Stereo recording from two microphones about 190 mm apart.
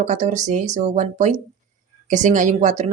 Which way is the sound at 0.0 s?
40° right (ahead or behind).